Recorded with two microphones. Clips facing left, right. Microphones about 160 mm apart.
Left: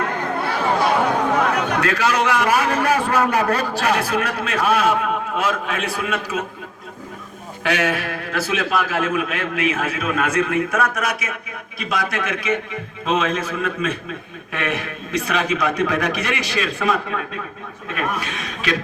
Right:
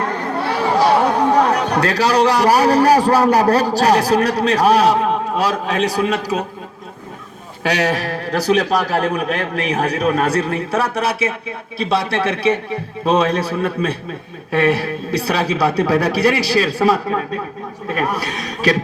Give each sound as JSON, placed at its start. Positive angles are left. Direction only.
{"t": 0.0, "sound": "speech", "side_deg": -35}
{"t": 7.6, "sound": "a man's voice", "side_deg": -35}